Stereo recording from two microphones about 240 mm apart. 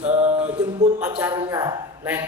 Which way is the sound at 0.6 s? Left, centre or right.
Centre.